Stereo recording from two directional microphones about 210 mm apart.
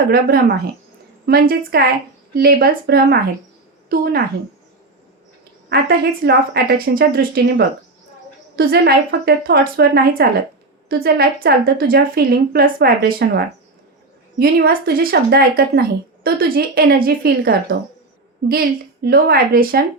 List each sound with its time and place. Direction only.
0.1 s speech: 45° right (ahead or behind)
6.2 s a woman's voice: 50° right (ahead or behind)